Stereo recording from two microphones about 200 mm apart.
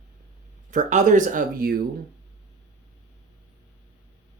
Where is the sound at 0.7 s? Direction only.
40° right (ahead or behind).